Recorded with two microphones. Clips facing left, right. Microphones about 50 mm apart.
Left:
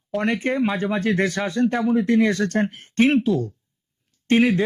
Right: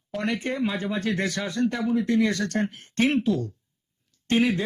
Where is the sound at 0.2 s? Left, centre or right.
Left.